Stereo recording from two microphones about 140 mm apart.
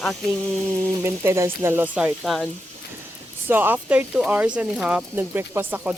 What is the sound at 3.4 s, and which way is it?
Speech, 15° right (ahead or behind).